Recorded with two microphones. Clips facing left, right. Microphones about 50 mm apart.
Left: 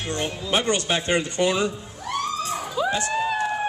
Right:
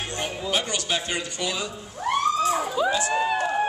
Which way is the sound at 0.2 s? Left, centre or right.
Left.